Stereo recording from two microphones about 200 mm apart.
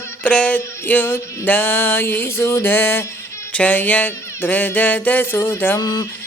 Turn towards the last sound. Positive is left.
turn(degrees=20)  # may be behind; listen again after turning